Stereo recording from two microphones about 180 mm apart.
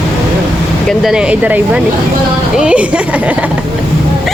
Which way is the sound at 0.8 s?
5° right (ahead or behind).